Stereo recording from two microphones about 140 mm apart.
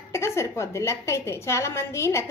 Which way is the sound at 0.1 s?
20° left (ahead or behind).